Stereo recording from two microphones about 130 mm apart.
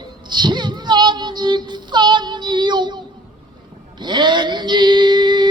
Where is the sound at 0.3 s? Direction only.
35° right (ahead or behind).